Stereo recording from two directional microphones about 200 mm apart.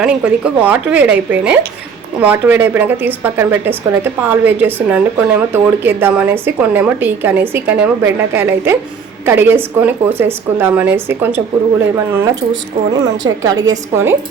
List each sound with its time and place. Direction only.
0.0 s a woman's voice: 5° right (ahead or behind)